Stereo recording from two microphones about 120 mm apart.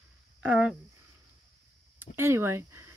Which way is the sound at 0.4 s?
10° right (ahead or behind).